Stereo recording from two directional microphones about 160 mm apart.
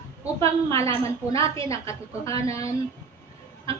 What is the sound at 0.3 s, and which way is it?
A woman's voice, 20° left (ahead or behind).